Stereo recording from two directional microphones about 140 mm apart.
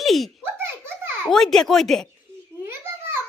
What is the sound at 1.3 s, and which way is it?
Speech, 5° left (ahead or behind).